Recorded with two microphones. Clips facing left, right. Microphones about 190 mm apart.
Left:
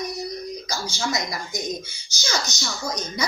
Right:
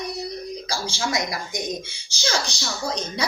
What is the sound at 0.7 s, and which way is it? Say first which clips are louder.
Speech: right 2 dB; 30° right (ahead or behind).